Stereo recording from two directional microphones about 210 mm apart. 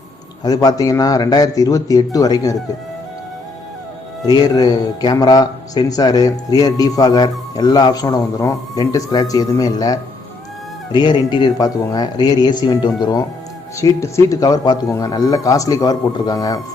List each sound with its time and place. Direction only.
0.4 s a man's voice: 15° left (ahead or behind)
4.3 s a man's voice: 20° left (ahead or behind)